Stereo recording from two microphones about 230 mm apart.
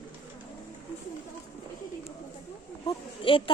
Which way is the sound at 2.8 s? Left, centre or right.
Left.